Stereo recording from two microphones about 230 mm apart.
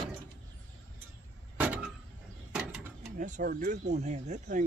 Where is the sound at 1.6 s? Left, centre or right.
Centre.